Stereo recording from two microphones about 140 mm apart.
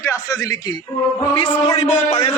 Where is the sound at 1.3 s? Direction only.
45° left (ahead or behind).